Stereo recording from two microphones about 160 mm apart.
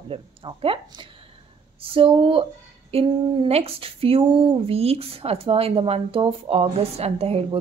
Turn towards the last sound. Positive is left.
turn(degrees=-40)  # may be behind; listen again after turning